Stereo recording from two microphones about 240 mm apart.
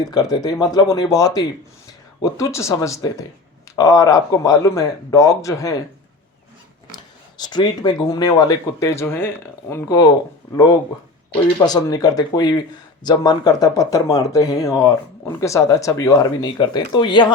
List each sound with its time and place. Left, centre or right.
0.0 s speech: centre
6.9 s speech: centre
11.6 s speech: centre